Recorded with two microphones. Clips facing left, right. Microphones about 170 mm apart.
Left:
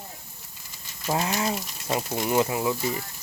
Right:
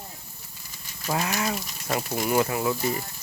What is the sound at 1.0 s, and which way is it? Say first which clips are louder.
Speech: left 1 dB; 25° left (ahead or behind).